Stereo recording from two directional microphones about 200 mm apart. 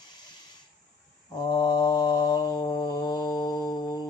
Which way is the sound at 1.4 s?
20° left (ahead or behind).